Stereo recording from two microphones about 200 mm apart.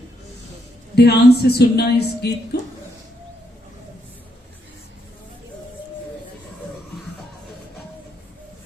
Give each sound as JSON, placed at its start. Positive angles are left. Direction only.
{"t": 0.9, "sound": "speech", "side_deg": 55}